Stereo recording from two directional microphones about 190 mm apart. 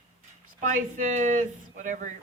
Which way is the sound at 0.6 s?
45° right (ahead or behind).